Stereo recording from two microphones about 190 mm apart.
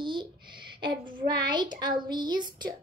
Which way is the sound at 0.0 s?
25° right (ahead or behind).